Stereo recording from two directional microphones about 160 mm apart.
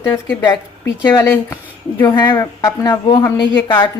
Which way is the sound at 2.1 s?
25° left (ahead or behind).